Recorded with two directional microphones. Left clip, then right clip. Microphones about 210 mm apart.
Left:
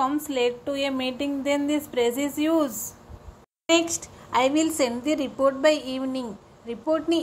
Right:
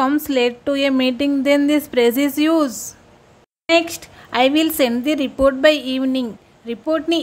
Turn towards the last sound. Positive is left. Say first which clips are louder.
# right 5 dB
turn(degrees=-40)  # may be behind; listen again after turning